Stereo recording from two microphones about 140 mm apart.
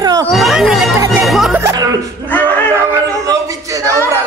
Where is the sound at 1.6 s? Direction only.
20° right (ahead or behind).